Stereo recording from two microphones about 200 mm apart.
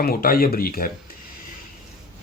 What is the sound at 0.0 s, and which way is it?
Speech, 50° left (ahead or behind).